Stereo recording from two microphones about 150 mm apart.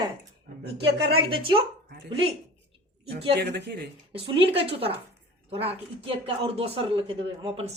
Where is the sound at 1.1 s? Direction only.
35° right (ahead or behind).